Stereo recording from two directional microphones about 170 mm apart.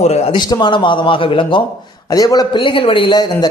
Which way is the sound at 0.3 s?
25° left (ahead or behind).